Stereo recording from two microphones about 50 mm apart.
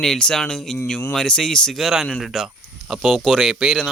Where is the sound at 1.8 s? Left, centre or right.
Centre.